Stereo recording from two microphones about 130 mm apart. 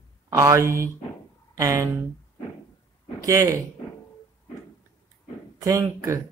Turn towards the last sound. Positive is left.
turn(degrees=-25)  # may be behind; listen again after turning